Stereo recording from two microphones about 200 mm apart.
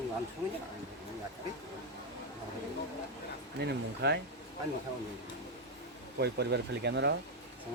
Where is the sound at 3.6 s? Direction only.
60° right (ahead or behind).